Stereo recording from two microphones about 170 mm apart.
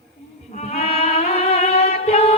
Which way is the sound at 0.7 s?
35° left (ahead or behind).